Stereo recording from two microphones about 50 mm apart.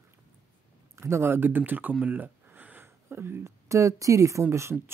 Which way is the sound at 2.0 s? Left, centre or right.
Right.